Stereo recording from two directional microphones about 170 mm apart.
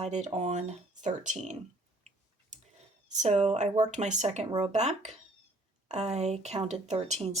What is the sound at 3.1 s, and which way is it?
Speech, 45° right (ahead or behind).